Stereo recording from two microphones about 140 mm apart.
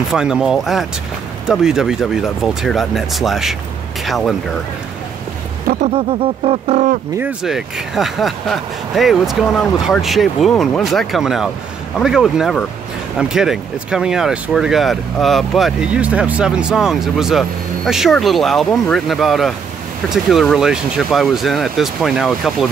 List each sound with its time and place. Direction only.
0.1 s speech: 5° right (ahead or behind)
5.9 s a sound: 45° right (ahead or behind)
7.4 s speech: centre (ahead or behind)